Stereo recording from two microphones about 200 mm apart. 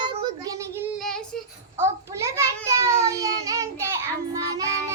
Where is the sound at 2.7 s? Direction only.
15° right (ahead or behind).